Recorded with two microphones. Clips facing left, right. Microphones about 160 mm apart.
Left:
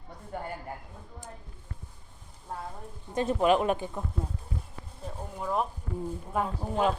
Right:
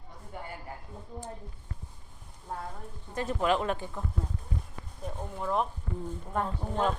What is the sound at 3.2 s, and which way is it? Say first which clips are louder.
Speech: left 4 dB; 20° left (ahead or behind).